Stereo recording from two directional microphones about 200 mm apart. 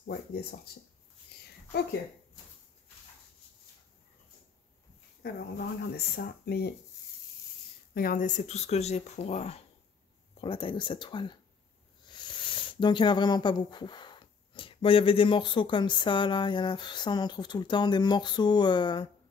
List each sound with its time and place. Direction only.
0.0 s speech: 50° left (ahead or behind)
5.2 s speech: 50° left (ahead or behind)
7.9 s speech: 45° left (ahead or behind); by 19.0 s 20° left (ahead or behind)